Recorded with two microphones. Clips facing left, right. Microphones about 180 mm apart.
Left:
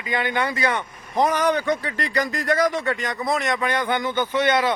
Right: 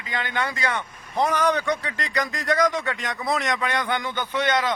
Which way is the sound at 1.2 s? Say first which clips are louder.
Left 2 dB; 45° left (ahead or behind).